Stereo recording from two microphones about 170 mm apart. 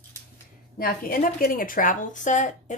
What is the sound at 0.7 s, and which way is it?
Speech, 60° left (ahead or behind).